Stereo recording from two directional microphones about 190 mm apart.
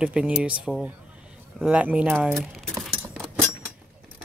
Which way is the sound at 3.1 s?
5° right (ahead or behind).